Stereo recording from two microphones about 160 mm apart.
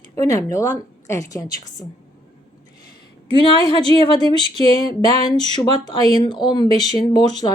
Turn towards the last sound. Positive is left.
turn(degrees=25)  # may be behind; listen again after turning